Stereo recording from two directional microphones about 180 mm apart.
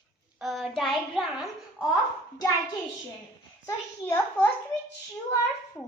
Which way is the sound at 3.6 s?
15° left (ahead or behind).